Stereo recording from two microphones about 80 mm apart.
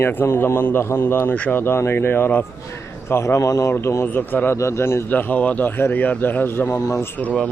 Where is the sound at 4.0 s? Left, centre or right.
Left.